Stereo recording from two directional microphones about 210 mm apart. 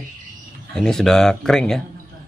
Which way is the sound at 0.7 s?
Centre (ahead or behind).